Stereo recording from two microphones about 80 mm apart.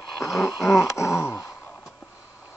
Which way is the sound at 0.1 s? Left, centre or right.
Centre.